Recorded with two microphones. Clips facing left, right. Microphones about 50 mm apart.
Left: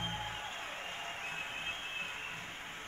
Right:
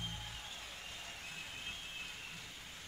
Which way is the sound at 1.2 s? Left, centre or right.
Left.